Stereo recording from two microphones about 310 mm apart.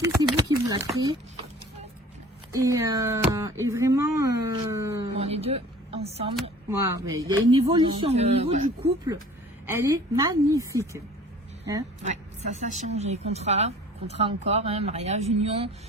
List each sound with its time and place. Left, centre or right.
0.0 s speech: centre
2.5 s speech: centre
6.3 s speech: centre
7.0 s speech: right
7.5 s a woman's voice: centre
9.6 s speech: centre
12.0 s a woman's voice: right